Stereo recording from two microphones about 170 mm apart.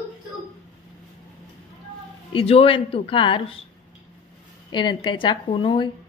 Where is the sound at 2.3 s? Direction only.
35° left (ahead or behind).